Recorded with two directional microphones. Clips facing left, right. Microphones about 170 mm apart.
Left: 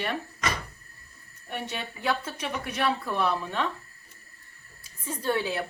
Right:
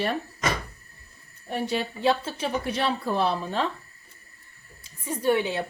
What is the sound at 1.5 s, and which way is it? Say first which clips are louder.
Speech: right 7 dB; 35° right (ahead or behind).